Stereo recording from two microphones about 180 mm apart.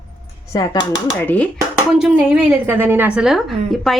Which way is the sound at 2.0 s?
5° right (ahead or behind).